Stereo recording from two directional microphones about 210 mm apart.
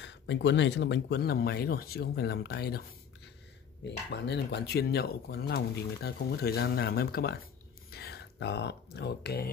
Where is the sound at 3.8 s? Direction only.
55° left (ahead or behind).